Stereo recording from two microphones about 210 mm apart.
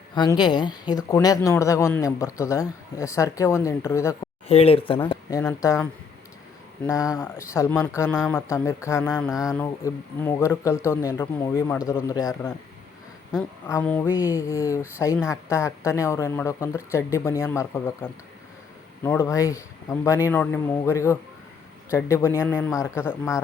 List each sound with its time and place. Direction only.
0.1 s speech: 20° left (ahead or behind)
4.4 s speech: 30° left (ahead or behind)
5.0 s speech: 15° left (ahead or behind)
9.3 s speech: 5° right (ahead or behind)
9.6 s speech: 10° left (ahead or behind)
13.7 s speech: 10° left (ahead or behind)